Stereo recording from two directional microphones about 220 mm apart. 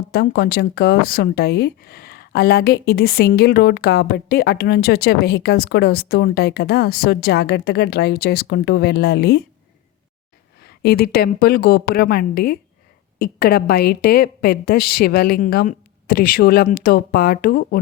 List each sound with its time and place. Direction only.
0.1 s speech: 45° left (ahead or behind)
10.6 s speech: 45° left (ahead or behind)